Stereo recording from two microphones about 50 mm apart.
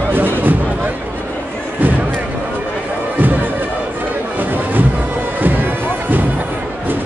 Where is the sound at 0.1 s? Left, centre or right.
Right.